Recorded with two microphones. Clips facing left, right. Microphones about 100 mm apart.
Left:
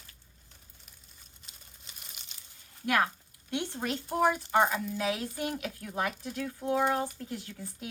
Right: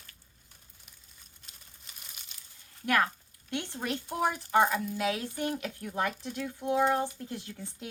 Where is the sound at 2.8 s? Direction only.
20° left (ahead or behind).